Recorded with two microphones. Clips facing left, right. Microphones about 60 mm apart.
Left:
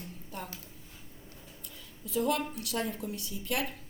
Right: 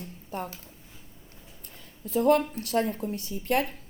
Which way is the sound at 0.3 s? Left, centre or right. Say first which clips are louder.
Right 8 dB; right.